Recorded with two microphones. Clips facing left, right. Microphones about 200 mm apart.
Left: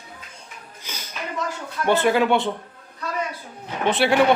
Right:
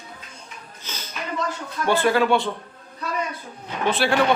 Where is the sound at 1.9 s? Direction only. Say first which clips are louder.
Left 1 dB; 20° left (ahead or behind).